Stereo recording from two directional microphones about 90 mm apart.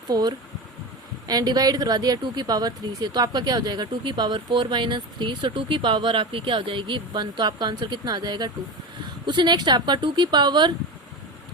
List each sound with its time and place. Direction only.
0.1 s speech: 50° right (ahead or behind)